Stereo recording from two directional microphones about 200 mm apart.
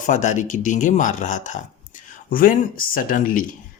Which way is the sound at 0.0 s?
40° left (ahead or behind).